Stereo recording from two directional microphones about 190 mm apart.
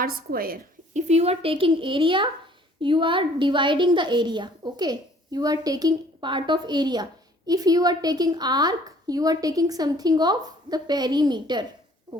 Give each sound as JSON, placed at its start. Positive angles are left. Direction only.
{"t": 0.0, "sound": "a woman's voice", "side_deg": -50}